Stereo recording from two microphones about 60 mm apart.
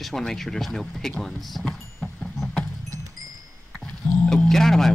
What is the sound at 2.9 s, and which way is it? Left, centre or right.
Wind chime, right.